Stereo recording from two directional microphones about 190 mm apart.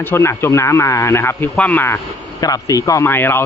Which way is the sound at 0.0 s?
10° left (ahead or behind).